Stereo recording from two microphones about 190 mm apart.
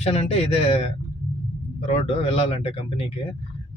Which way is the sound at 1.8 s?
35° left (ahead or behind).